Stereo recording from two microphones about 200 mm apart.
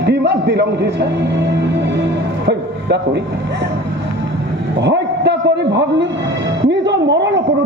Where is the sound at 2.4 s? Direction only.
60° right (ahead or behind).